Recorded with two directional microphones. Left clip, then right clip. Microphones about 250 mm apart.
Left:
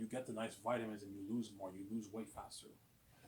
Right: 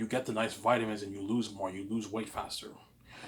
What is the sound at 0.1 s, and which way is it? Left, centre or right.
Speech, right.